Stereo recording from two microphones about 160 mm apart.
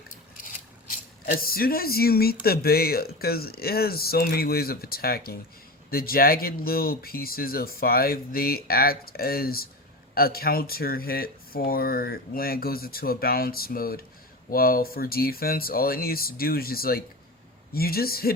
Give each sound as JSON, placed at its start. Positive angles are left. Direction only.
{"t": 1.2, "sound": "speech", "side_deg": 70}